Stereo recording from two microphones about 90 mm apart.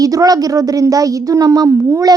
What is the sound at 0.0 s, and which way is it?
A woman's voice, 40° right (ahead or behind).